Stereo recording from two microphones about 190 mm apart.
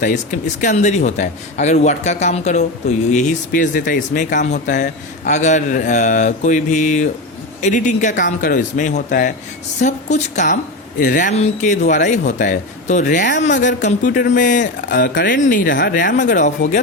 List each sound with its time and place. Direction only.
0.0 s speech: 40° left (ahead or behind)